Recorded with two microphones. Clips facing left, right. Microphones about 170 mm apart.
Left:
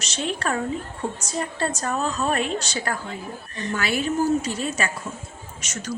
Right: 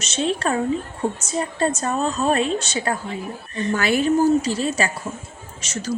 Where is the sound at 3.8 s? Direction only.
45° right (ahead or behind).